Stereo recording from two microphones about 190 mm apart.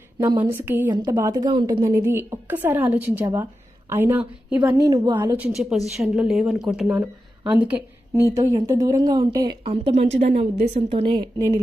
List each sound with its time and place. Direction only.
0.2 s a woman's voice: 15° right (ahead or behind)
1.8 s a woman's voice: 10° right (ahead or behind)
4.8 s a woman's voice: 20° right (ahead or behind)
6.0 s a woman's voice: centre (ahead or behind); by 9.6 s 20° right (ahead or behind)
9.6 s a woman's voice: 30° right (ahead or behind)